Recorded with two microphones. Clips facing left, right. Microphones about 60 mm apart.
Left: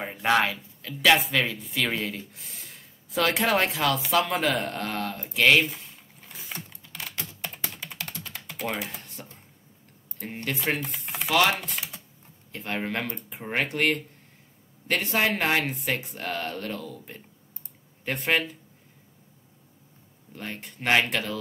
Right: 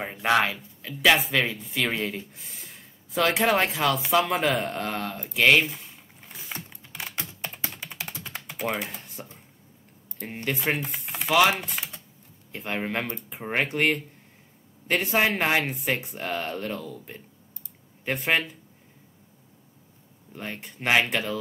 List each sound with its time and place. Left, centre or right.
0.0 s speech: centre
6.2 s typing: centre
7.4 s typing: centre
8.8 s computer keyboard: centre
10.2 s speech: centre
20.3 s speech: centre